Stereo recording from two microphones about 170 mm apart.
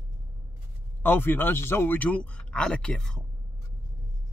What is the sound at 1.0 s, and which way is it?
Speech, 10° left (ahead or behind).